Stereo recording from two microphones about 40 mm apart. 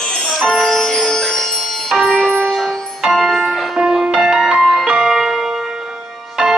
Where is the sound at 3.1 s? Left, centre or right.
Centre.